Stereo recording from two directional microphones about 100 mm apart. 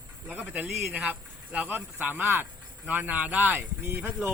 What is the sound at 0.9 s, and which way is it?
Speech, 15° right (ahead or behind).